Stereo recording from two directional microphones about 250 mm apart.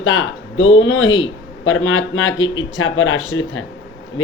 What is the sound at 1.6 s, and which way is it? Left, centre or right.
Speech, left.